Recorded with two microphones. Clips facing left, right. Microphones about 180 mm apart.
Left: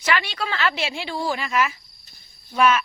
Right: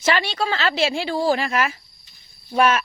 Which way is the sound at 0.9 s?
40° right (ahead or behind).